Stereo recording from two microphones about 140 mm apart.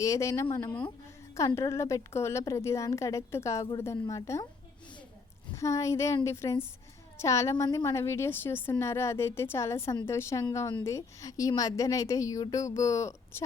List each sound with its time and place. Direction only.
0.0 s a woman's voice: 20° left (ahead or behind)
5.5 s a woman's voice: 20° left (ahead or behind)